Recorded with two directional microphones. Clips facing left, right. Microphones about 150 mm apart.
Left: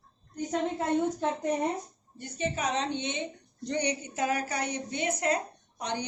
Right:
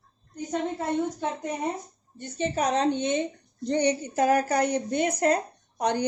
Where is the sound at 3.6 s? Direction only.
30° right (ahead or behind).